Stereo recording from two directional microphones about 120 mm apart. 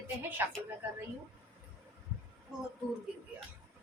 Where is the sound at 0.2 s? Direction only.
15° right (ahead or behind).